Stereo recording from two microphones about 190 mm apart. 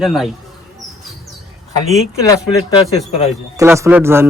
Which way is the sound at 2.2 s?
20° left (ahead or behind).